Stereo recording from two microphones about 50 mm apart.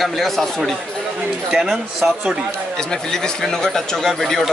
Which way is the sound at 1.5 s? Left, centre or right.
Centre.